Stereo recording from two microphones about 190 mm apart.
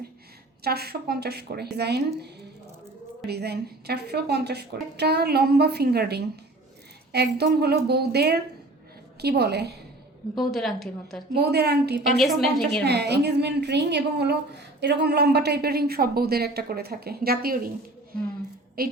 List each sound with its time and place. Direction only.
0.6 s a woman's voice: 55° right (ahead or behind)
3.2 s a woman's voice: 60° right (ahead or behind)
10.3 s speech: centre (ahead or behind)
11.3 s a woman's voice: 60° right (ahead or behind)
12.1 s speech: centre (ahead or behind)
12.8 s a woman's voice: 60° right (ahead or behind)
18.8 s a woman's voice: 50° right (ahead or behind)